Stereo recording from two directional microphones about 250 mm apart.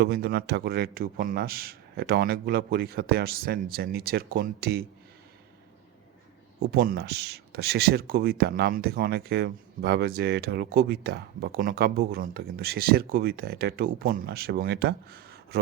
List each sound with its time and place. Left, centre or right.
0.0 s speech: right
6.6 s speech: right